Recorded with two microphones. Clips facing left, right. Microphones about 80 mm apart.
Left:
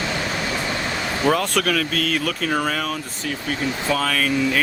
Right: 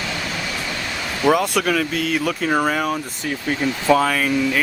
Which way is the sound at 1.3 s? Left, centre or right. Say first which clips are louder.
Right 3 dB; centre.